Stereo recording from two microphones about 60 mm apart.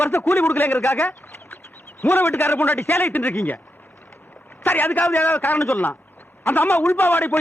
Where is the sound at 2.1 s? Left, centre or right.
Left.